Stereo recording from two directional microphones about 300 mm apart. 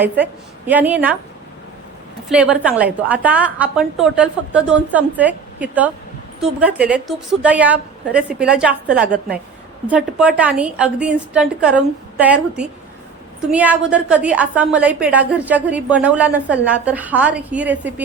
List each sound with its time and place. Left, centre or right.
0.7 s a woman's voice: centre
2.3 s a woman's voice: centre